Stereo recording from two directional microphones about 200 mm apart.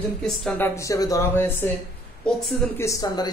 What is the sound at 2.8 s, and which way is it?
Speech, 15° left (ahead or behind).